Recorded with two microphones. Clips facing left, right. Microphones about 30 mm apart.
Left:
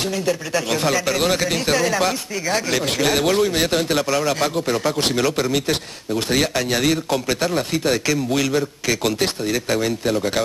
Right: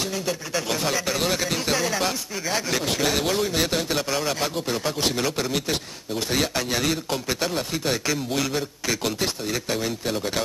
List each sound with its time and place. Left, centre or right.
0.1 s speech: centre
4.0 s speech: centre
4.9 s speech: left
5.2 s speech: centre
9.7 s speech: centre